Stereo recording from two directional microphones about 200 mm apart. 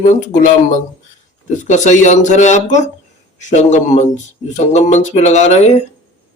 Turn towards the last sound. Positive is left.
turn(degrees=35)  # may be behind; listen again after turning